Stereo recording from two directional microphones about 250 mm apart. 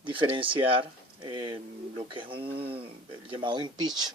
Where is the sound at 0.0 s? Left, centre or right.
Centre.